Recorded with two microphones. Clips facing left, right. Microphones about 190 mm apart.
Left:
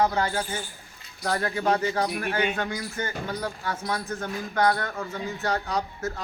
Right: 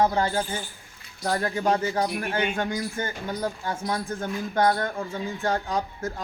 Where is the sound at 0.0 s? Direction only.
25° right (ahead or behind).